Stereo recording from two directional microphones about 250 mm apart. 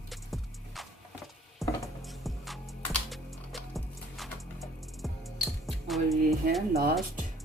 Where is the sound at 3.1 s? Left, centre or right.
Centre.